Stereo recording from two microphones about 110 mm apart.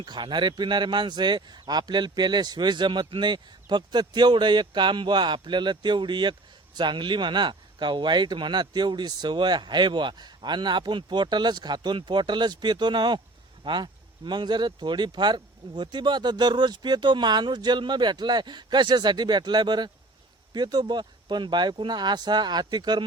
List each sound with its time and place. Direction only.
0.0 s speech: 45° right (ahead or behind)